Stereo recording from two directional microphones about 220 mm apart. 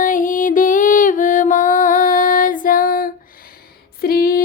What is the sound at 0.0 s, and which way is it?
Music, 35° left (ahead or behind).